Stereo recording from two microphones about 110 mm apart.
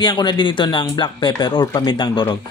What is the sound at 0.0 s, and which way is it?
Speech, 40° left (ahead or behind).